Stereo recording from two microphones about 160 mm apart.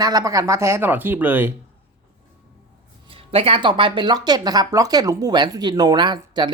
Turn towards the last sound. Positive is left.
turn(degrees=-30)  # may be behind; listen again after turning